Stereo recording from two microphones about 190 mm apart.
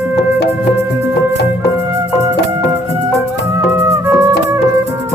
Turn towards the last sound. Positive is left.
turn(degrees=-15)  # may be behind; listen again after turning